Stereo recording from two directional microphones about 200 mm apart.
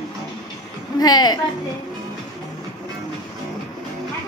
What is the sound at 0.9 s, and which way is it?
Speech, 20° left (ahead or behind).